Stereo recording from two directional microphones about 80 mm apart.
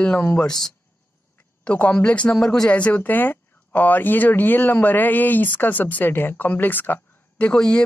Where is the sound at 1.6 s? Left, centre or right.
Centre.